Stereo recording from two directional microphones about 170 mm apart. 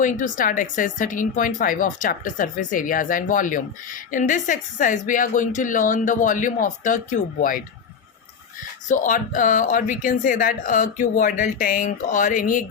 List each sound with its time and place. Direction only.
0.0 s speech: 50° left (ahead or behind)
8.9 s speech: 50° left (ahead or behind)